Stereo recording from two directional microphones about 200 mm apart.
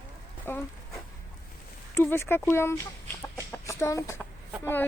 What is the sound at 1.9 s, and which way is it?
Speech, 10° left (ahead or behind).